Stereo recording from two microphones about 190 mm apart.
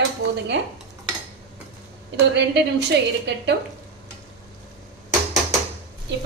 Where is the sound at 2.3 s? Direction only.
65° right (ahead or behind).